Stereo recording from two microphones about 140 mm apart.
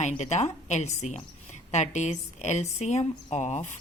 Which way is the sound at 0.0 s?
55° left (ahead or behind).